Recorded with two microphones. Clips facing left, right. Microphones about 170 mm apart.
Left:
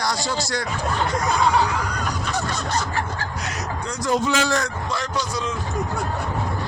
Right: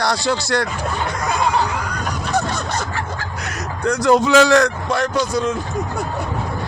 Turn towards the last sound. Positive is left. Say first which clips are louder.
# right 7 dB
turn(degrees=-50)  # may be behind; listen again after turning